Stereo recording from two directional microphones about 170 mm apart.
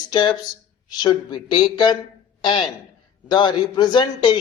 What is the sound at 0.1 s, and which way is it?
A man's voice, 25° left (ahead or behind).